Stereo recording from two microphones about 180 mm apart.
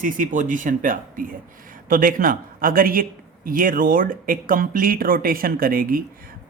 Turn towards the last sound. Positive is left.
turn(degrees=-55)  # may be behind; listen again after turning